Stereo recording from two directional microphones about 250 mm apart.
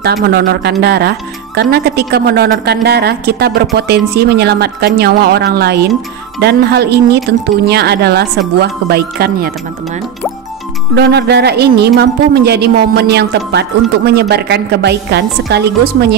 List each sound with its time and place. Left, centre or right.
0.0 s speech: right
11.0 s speech: right